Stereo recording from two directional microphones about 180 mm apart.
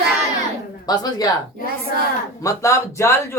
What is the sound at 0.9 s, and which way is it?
Speech, 20° left (ahead or behind).